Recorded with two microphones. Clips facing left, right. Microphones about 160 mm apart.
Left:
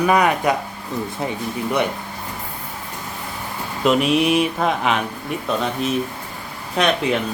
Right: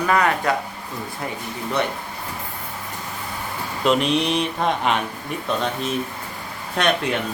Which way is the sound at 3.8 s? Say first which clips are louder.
Left 3 dB; 5° left (ahead or behind).